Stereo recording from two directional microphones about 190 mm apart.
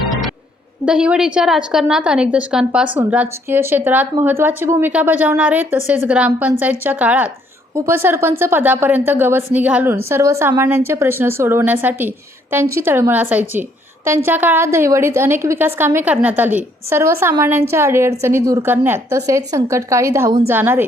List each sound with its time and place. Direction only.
0.9 s a woman's voice: 5° right (ahead or behind)
13.5 s a sound: 10° right (ahead or behind)
14.3 s a woman's voice: 10° right (ahead or behind)